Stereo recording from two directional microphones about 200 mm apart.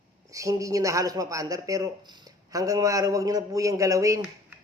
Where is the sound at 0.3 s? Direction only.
15° right (ahead or behind).